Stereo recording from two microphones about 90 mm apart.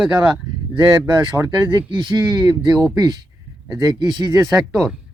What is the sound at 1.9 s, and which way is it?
Speech, 50° right (ahead or behind).